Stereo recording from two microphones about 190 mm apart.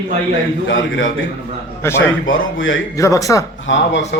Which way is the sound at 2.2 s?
90° left.